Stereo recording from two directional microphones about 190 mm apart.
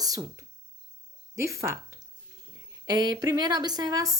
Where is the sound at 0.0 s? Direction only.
20° right (ahead or behind).